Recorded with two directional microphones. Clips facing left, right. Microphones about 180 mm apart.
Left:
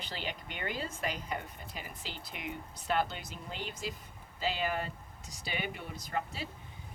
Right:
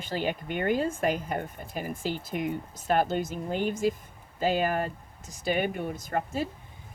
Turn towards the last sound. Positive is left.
turn(degrees=-50)  # may be behind; listen again after turning